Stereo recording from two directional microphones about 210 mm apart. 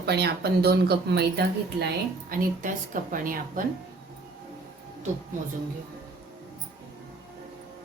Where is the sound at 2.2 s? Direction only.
40° right (ahead or behind).